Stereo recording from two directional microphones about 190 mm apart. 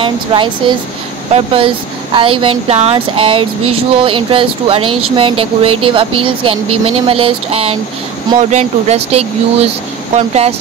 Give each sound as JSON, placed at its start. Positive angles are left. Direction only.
{"t": 0.0, "sound": "speech", "side_deg": -25}